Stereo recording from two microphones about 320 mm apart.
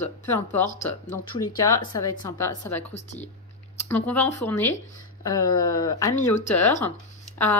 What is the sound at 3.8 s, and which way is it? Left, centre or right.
A woman's voice, centre.